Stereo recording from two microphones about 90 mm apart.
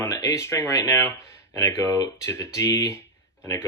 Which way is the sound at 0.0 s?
35° left (ahead or behind).